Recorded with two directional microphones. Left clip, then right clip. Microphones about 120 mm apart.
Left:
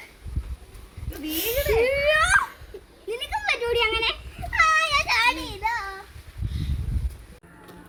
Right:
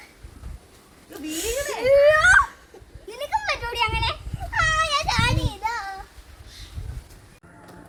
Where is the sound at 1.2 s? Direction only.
5° right (ahead or behind).